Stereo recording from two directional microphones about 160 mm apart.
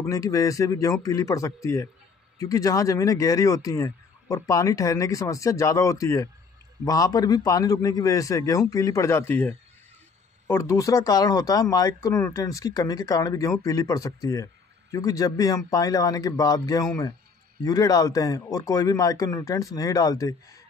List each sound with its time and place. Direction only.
0.1 s speech: 20° left (ahead or behind)